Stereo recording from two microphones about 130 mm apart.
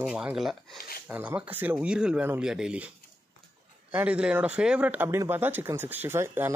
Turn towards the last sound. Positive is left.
turn(degrees=-20)  # may be behind; listen again after turning